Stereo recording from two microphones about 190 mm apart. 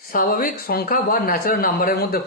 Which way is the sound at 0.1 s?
50° left (ahead or behind).